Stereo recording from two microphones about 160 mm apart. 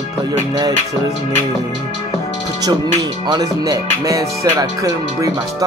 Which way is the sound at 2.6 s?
25° right (ahead or behind).